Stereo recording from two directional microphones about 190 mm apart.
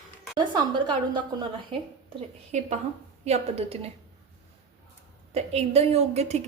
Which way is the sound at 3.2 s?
35° right (ahead or behind).